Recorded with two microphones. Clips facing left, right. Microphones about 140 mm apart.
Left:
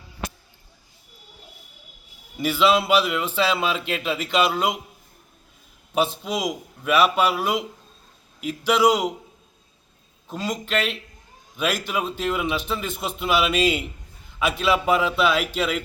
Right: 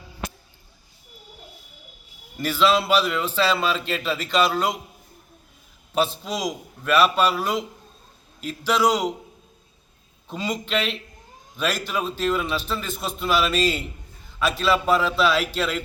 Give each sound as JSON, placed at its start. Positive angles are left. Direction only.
{"t": 2.4, "sound": "a man's voice", "side_deg": 10}
{"t": 5.9, "sound": "a man's voice", "side_deg": 10}
{"t": 10.2, "sound": "a man's voice", "side_deg": 5}